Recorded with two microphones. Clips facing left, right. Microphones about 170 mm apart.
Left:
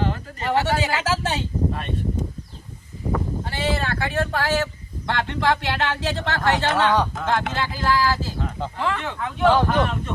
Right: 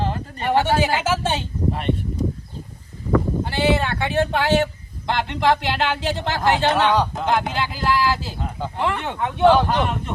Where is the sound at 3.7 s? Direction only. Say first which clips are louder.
Right 3 dB; 20° right (ahead or behind).